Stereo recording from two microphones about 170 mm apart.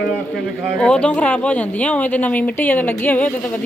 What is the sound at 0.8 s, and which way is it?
A woman's voice, 5° left (ahead or behind).